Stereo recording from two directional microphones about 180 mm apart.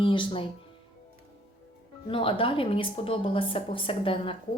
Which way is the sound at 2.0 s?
30° left (ahead or behind).